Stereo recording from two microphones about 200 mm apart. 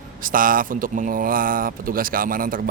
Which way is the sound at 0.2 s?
45° right (ahead or behind).